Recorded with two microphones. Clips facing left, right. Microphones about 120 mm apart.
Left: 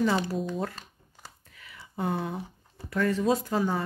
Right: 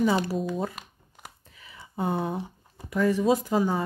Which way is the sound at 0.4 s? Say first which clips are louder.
Right 2 dB; 10° right (ahead or behind).